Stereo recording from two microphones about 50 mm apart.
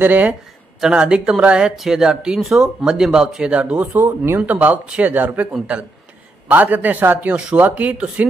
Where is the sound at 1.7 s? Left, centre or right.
Centre.